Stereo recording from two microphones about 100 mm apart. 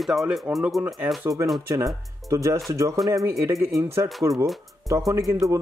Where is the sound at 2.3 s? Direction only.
30° right (ahead or behind).